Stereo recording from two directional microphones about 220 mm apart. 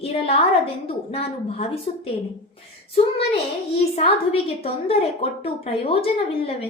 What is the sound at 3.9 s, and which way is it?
A woman's voice, 25° left (ahead or behind).